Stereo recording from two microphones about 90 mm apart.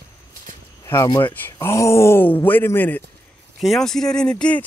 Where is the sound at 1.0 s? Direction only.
55° left (ahead or behind).